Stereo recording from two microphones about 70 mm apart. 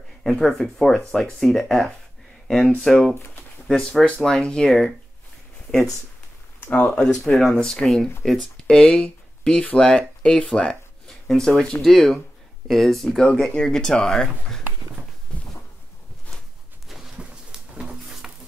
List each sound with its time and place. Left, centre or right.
0.2 s speech: centre
4.0 s speech: centre
6.9 s speech: centre
8.7 s speech: centre
16.8 s a sound: centre
18.0 s music: centre